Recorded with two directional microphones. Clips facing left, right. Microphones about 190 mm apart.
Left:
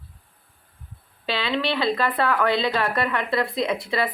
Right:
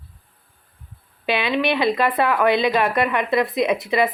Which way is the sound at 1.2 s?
15° right (ahead or behind).